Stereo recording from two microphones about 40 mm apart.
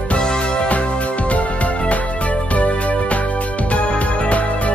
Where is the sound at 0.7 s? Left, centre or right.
Left.